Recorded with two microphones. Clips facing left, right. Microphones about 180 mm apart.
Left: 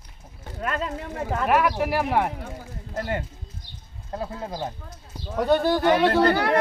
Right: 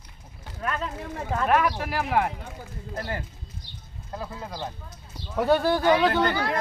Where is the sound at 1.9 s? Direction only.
20° left (ahead or behind).